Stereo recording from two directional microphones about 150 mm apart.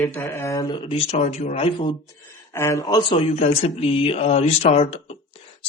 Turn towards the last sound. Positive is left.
turn(degrees=40)  # may be behind; listen again after turning